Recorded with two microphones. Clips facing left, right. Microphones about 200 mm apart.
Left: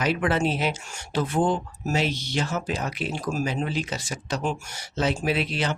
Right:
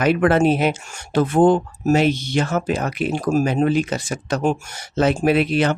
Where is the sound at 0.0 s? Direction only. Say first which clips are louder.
Right 8 dB; 55° right (ahead or behind).